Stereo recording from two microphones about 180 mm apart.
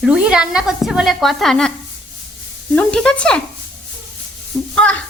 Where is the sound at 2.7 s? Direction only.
5° left (ahead or behind).